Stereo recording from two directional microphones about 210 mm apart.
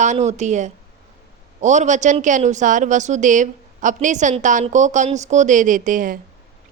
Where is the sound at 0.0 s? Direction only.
35° right (ahead or behind).